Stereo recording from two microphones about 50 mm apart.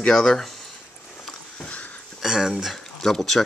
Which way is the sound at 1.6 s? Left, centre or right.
Left.